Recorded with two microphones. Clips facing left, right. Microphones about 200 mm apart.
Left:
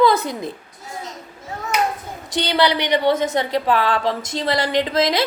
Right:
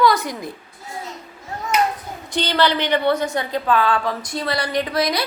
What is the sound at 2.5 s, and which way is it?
A woman's voice, 15° left (ahead or behind).